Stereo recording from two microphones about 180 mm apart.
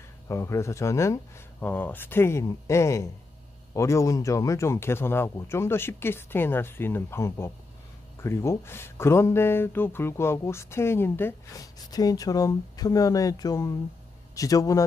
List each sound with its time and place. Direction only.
0.3 s a man's voice: 15° left (ahead or behind)